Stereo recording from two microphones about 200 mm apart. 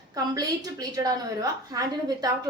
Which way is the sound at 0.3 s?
20° right (ahead or behind).